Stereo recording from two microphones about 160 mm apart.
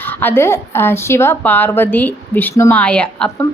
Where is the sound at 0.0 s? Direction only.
10° left (ahead or behind).